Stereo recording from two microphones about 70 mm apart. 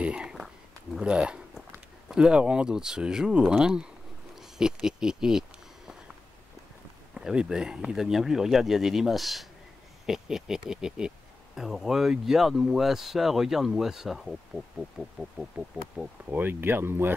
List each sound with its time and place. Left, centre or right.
0.0 s a sound: centre
0.9 s speech: centre
7.2 s speech: centre
15.5 s speech: right